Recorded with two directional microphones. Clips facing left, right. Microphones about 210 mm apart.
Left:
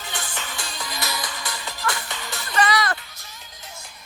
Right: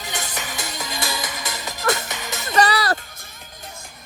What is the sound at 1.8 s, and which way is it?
Music, 45° right (ahead or behind).